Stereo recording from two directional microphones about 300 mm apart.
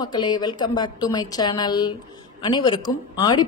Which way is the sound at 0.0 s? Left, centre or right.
Centre.